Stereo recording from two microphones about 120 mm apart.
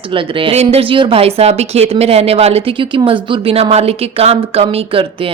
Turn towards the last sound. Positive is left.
turn(degrees=-50)  # may be behind; listen again after turning